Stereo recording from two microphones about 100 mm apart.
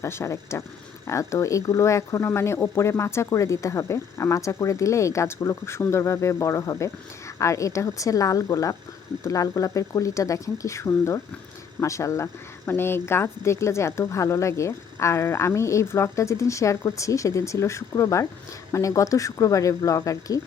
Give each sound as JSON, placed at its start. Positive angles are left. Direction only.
{"t": 0.0, "sound": "speech", "side_deg": 30}